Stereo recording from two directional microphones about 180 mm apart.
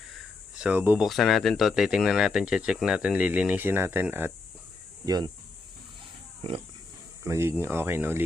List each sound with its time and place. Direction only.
0.6 s speech: 10° right (ahead or behind)
5.0 s speech: 25° right (ahead or behind)
7.3 s speech: 15° right (ahead or behind)